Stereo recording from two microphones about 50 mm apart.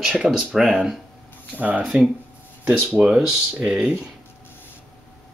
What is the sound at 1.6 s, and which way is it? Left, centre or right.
Speech, right.